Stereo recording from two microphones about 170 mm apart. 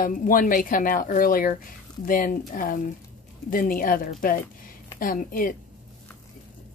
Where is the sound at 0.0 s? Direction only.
55° left (ahead or behind).